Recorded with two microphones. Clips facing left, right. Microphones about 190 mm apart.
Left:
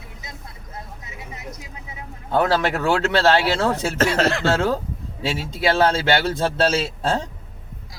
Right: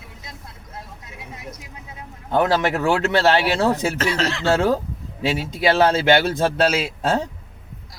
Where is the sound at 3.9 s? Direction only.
50° left (ahead or behind).